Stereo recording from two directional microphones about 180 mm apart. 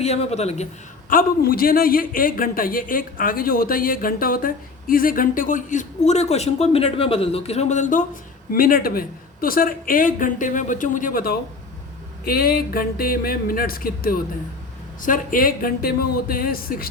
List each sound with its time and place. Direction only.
0.0 s speech: 35° left (ahead or behind)
1.1 s a man's voice: 55° left (ahead or behind)